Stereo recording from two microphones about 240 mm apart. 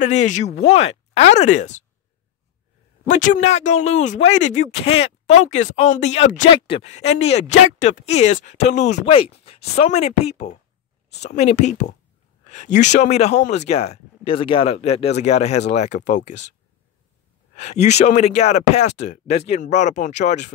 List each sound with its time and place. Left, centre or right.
0.0 s speech: left
3.1 s a man's voice: left
17.6 s speech: left